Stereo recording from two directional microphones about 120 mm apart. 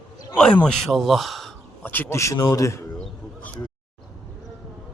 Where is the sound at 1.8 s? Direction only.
15° left (ahead or behind).